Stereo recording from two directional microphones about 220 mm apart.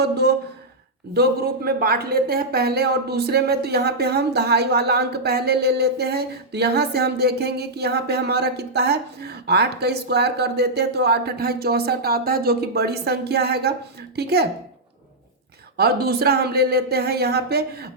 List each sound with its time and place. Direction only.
0.0 s speech: 45° right (ahead or behind)
15.8 s speech: 45° right (ahead or behind)